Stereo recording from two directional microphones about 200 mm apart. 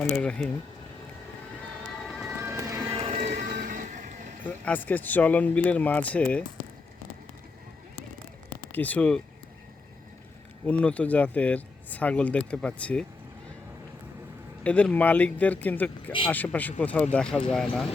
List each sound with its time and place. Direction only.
0.0 s speech: 5° left (ahead or behind)
2.3 s music: 15° right (ahead or behind)
2.9 s music: 25° right (ahead or behind)
3.2 s music: 40° right (ahead or behind)
3.5 s vehicle: 45° right (ahead or behind)
4.4 s speech: 10° left (ahead or behind)
8.7 s speech: 10° left (ahead or behind)
10.7 s speech: 5° left (ahead or behind)
14.6 s speech: 5° left (ahead or behind)